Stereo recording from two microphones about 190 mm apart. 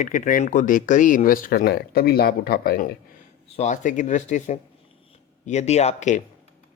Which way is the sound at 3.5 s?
40° left (ahead or behind).